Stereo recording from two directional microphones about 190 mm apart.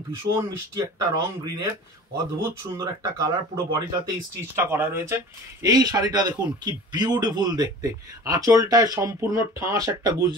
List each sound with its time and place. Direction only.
0.1 s speech: 15° right (ahead or behind)
2.8 s speech: 20° right (ahead or behind)